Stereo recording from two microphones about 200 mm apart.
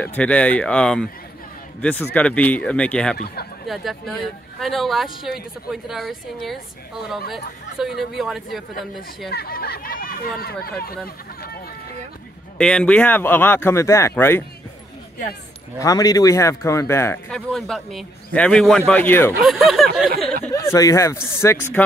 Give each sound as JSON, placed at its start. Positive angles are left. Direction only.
{"t": 0.0, "sound": "a woman's voice", "side_deg": 5}
{"t": 9.3, "sound": "speech", "side_deg": 50}
{"t": 12.5, "sound": "speech", "side_deg": 5}
{"t": 15.8, "sound": "speech", "side_deg": 15}
{"t": 19.4, "sound": "a woman's voice", "side_deg": 0}
{"t": 20.4, "sound": "speech", "side_deg": 15}